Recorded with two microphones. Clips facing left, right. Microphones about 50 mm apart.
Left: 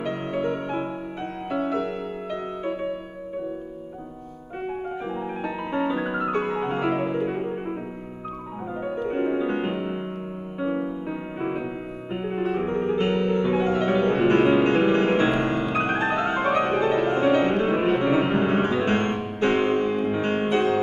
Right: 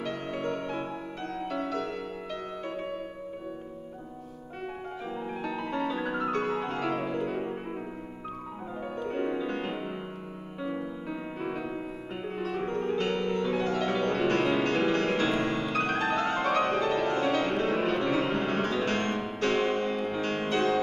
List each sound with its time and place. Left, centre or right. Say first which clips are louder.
0.0 s music: left 6 dB; centre
5.1 s music: left 4 dB; left
9.1 s music: left 6 dB; left